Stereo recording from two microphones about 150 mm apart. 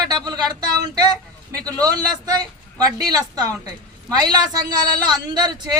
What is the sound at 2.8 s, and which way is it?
A woman's voice, 25° right (ahead or behind).